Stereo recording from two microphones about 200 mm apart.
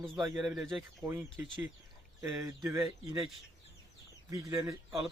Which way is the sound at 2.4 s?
15° right (ahead or behind).